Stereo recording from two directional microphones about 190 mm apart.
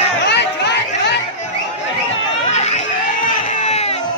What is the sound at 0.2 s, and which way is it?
Chatter, 65° left (ahead or behind).